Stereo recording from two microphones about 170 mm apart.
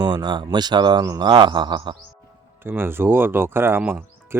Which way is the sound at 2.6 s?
15° right (ahead or behind).